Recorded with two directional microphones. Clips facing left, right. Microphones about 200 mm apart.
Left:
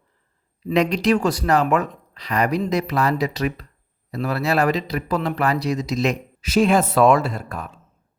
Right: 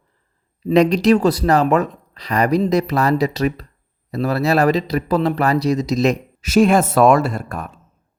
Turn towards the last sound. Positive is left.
turn(degrees=-50)  # may be behind; listen again after turning